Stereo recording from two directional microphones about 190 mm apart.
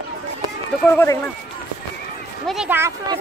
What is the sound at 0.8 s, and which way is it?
Speech, 10° left (ahead or behind).